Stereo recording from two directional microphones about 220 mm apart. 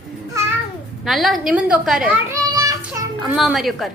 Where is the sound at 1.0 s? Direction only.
Centre (ahead or behind).